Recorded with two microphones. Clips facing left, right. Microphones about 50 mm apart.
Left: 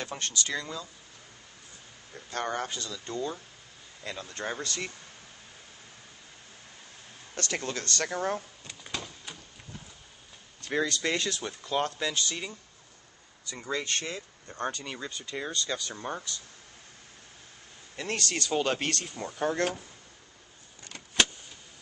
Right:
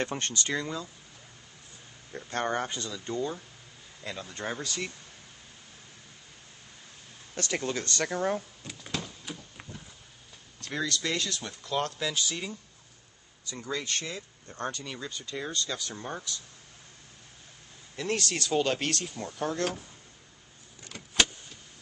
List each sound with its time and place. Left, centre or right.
0.2 s speech: right
0.6 s speech: centre
2.1 s speech: right
4.0 s speech: centre
7.3 s speech: centre
8.0 s door: centre
10.9 s speech: centre
13.7 s speech: centre
14.1 s speech: centre
17.9 s speech: centre
19.1 s speech: centre
20.8 s vehicle: centre